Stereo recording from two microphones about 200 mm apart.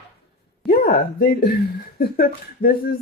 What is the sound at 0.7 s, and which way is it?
Speech, 45° left (ahead or behind).